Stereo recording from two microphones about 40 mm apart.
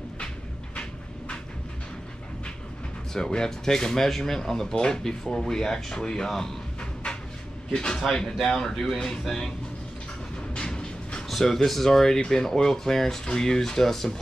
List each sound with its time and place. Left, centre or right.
3.1 s speech: centre
6.8 s a sound: left
7.7 s speech: centre
8.5 s speech: centre
10.5 s train: left
11.2 s speech: centre